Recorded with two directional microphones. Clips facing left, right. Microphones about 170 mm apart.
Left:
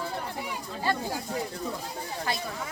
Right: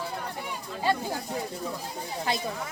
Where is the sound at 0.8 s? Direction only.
15° right (ahead or behind).